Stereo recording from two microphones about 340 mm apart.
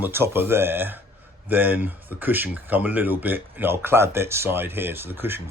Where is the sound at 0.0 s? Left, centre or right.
Centre.